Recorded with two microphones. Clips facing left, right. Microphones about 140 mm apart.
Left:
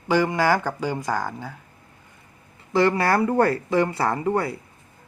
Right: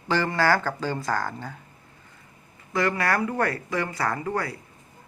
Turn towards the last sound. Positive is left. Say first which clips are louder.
# left 5 dB
turn(degrees=25)  # may be behind; listen again after turning